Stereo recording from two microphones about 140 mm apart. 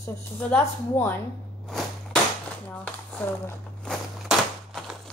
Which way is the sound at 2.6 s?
10° left (ahead or behind).